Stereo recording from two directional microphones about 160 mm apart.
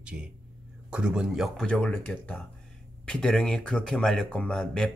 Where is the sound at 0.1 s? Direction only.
5° right (ahead or behind).